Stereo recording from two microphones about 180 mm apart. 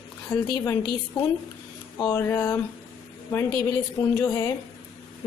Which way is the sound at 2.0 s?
15° left (ahead or behind).